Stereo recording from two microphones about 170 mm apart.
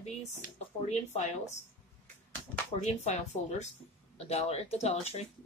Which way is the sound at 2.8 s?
40° left (ahead or behind).